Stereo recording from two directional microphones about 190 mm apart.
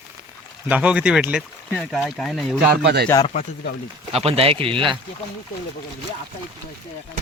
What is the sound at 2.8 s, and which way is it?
Speech, 60° right (ahead or behind).